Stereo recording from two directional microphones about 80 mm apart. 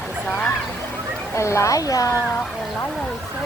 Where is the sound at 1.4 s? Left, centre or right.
Left.